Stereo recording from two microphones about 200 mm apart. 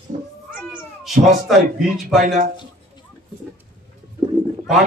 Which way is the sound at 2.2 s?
40° right (ahead or behind).